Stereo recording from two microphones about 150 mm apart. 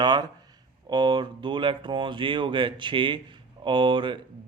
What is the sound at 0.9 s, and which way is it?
Speech, 30° right (ahead or behind).